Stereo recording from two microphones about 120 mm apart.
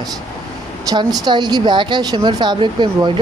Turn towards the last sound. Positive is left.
turn(degrees=-40)  # may be behind; listen again after turning